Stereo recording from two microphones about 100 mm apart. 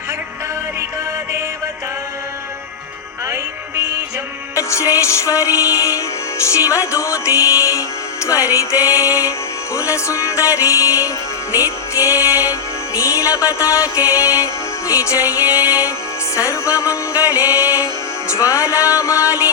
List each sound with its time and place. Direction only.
4.5 s music: 30° left (ahead or behind)